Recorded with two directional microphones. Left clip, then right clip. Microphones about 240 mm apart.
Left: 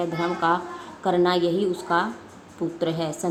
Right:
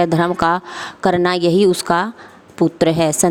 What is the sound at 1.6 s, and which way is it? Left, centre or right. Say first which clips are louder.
Speech: right 8 dB; right.